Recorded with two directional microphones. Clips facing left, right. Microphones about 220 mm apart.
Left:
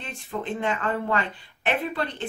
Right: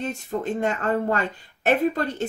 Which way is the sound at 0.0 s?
40° right (ahead or behind).